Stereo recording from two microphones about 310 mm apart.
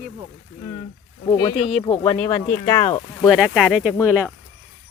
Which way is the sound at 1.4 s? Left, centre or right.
Centre.